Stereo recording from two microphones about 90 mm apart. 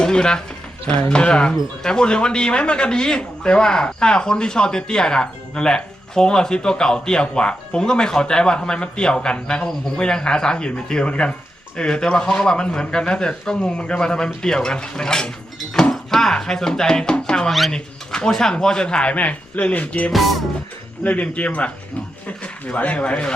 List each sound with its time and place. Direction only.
0.0 s a man's voice: 10° left (ahead or behind)
20.1 s music: centre (ahead or behind)
21.0 s a man's voice: 15° left (ahead or behind)